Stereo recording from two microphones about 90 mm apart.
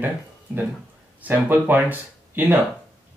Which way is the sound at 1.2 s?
20° right (ahead or behind).